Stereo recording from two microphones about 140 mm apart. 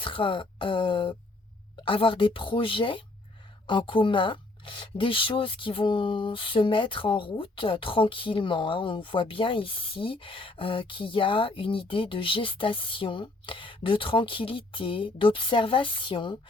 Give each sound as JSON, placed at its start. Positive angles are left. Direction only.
{"t": 0.0, "sound": "speech", "side_deg": 40}